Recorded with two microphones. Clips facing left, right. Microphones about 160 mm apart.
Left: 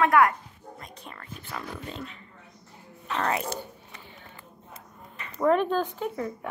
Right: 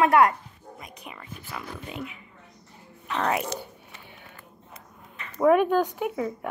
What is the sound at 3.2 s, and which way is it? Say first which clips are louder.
Speech: right 2 dB; 15° right (ahead or behind).